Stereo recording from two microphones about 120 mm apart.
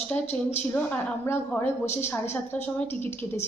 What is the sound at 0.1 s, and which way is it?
A woman's voice, 15° left (ahead or behind).